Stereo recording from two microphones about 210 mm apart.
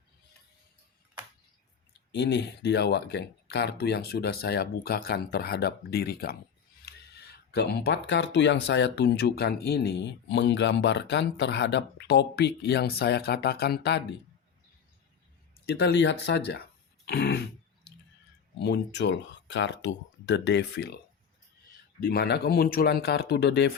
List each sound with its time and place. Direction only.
1.9 s speech: 55° left (ahead or behind)
15.6 s speech: 50° left (ahead or behind)
18.6 s speech: 55° left (ahead or behind)
22.0 s speech: 50° left (ahead or behind)